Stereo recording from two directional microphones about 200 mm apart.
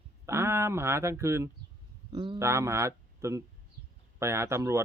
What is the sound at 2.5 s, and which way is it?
Speech, 15° right (ahead or behind).